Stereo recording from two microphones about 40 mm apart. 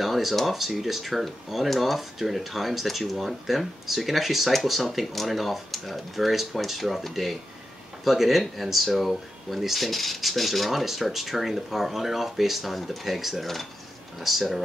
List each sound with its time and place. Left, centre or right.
0.0 s speech: centre